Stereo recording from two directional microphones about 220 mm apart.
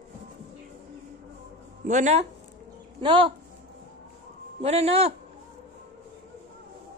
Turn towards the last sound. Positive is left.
turn(degrees=-30)  # may be behind; listen again after turning